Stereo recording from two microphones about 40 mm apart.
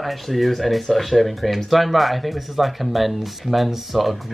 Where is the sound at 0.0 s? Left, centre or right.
Centre.